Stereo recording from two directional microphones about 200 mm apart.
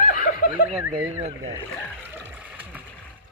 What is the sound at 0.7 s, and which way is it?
Speech, 10° right (ahead or behind).